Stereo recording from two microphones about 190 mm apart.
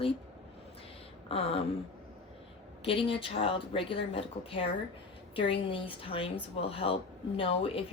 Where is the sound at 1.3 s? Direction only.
30° left (ahead or behind).